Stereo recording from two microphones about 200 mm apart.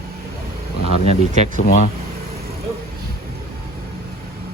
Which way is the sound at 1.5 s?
40° left (ahead or behind).